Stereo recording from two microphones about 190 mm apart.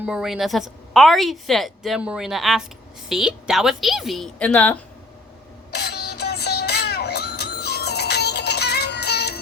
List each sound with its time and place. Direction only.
0.0 s a woman's voice: 5° right (ahead or behind)
5.7 s synthetic singing: 60° left (ahead or behind)